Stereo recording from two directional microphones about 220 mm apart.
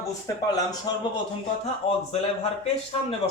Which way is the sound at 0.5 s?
15° left (ahead or behind).